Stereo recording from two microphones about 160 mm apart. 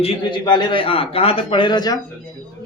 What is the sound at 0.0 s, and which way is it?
A man's voice, 35° left (ahead or behind).